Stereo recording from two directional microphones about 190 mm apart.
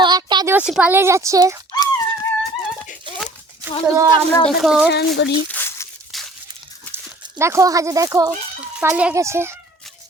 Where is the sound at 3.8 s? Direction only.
20° right (ahead or behind).